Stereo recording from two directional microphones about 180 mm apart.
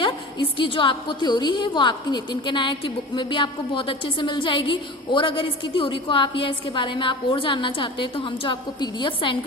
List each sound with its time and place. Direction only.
0.0 s a woman's voice: 25° left (ahead or behind)